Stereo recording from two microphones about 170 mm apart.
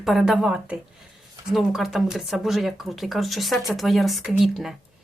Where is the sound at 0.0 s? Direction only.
Centre (ahead or behind).